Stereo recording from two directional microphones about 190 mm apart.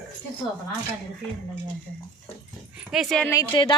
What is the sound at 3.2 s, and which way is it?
Speech, 20° left (ahead or behind).